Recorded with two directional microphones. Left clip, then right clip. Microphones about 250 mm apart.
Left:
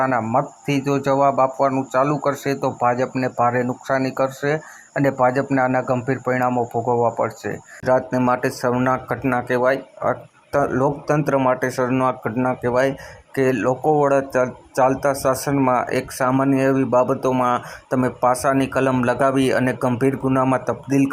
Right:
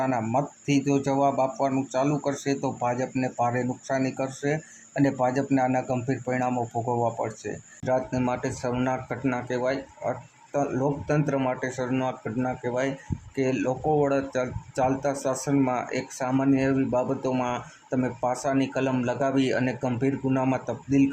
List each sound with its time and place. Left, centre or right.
0.0 s speech: centre
6.8 s speech: centre